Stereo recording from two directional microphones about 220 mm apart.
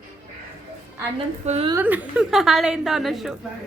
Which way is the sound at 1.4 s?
30° right (ahead or behind).